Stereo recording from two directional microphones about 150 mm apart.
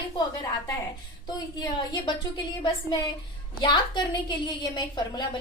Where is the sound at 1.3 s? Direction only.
25° left (ahead or behind).